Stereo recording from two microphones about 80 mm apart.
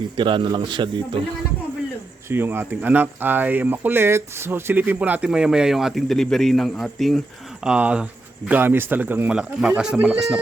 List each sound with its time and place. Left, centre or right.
0.2 s speech: right
2.3 s a man's voice: right; by 7.2 s centre
7.6 s speech: centre
8.4 s speech: right
9.3 s speech: centre